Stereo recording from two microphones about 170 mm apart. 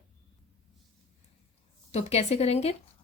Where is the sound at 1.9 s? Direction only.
40° left (ahead or behind).